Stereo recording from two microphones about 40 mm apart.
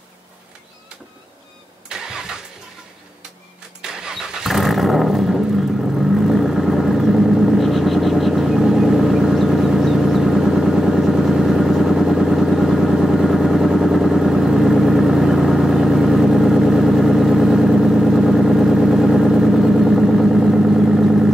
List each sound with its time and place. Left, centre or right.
1.9 s vehicle: centre
4.1 s vehicle: centre